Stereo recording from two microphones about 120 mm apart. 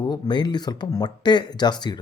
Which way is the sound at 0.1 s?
35° left (ahead or behind).